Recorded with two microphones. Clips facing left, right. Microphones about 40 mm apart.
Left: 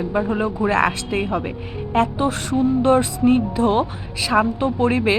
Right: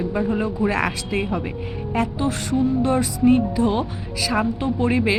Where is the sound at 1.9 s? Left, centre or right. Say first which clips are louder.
Left 4 dB; left.